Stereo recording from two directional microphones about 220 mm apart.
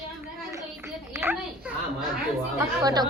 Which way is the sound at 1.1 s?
10° right (ahead or behind).